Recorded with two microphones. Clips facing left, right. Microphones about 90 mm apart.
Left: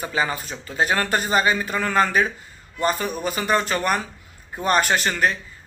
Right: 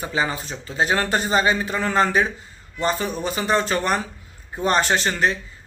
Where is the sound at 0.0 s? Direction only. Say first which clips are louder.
Even; 25° right (ahead or behind).